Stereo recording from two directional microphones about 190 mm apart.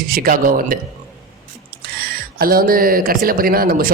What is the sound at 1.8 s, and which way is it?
Speech, 50° right (ahead or behind).